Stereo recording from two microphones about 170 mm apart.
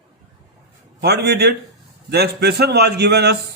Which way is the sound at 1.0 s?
70° right (ahead or behind).